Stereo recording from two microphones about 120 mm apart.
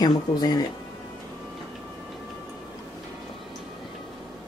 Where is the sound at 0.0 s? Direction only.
35° left (ahead or behind).